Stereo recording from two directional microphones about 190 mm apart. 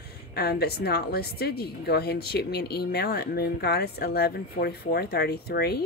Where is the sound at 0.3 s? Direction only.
55° left (ahead or behind).